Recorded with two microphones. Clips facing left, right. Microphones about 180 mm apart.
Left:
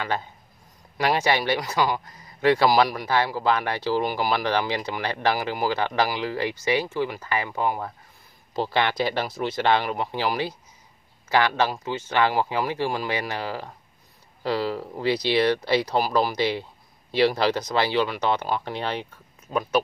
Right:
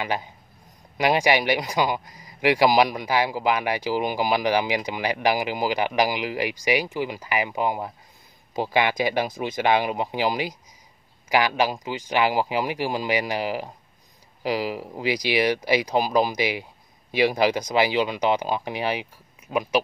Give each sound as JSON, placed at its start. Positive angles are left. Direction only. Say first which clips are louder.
{"t": 0.0, "sound": "speech", "louder": "right 1 dB", "side_deg": -10}